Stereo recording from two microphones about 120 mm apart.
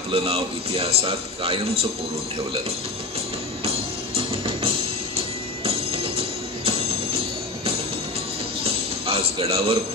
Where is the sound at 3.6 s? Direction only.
50° right (ahead or behind).